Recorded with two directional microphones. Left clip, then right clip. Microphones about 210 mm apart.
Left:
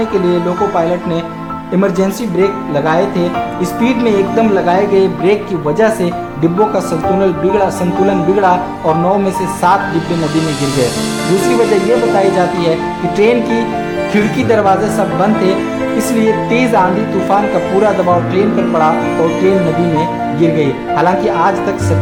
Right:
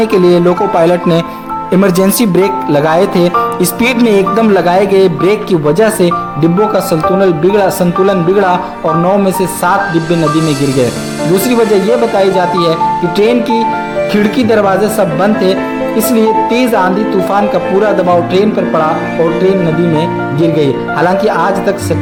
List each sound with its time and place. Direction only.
1.8 s speech: 40° right (ahead or behind)
13.1 s speech: 20° right (ahead or behind)
16.5 s speech: 20° right (ahead or behind)
20.6 s speech: 20° right (ahead or behind)